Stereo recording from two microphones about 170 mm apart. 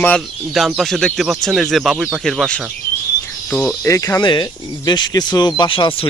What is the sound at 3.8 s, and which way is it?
Speech, 20° left (ahead or behind).